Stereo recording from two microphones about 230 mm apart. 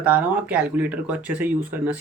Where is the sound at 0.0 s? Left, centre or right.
Centre.